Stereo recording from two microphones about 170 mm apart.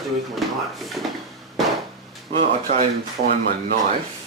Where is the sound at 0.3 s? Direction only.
Centre (ahead or behind).